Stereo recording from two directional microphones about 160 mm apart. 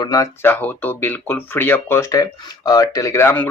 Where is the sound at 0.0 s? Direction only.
20° left (ahead or behind).